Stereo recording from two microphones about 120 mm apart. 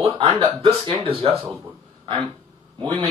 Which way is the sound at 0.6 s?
50° right (ahead or behind).